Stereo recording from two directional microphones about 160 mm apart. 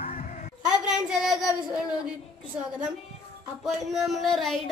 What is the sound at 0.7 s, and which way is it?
Child singing, 5° right (ahead or behind).